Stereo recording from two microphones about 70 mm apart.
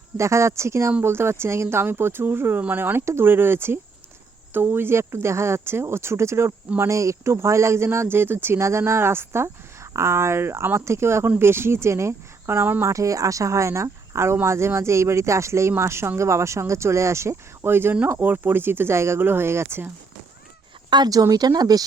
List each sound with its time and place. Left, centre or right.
0.2 s speech: right
12.9 s speech: right
20.9 s speech: right